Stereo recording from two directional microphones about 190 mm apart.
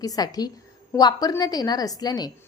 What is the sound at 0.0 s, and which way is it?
A woman's voice, 20° left (ahead or behind).